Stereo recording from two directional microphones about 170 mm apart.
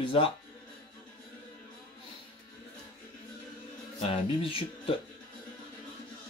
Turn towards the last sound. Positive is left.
turn(degrees=30)  # may be behind; listen again after turning